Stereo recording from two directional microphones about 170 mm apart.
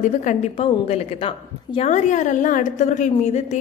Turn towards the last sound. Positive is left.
turn(degrees=40)  # may be behind; listen again after turning